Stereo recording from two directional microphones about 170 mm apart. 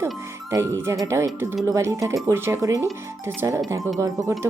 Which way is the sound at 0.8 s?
15° right (ahead or behind).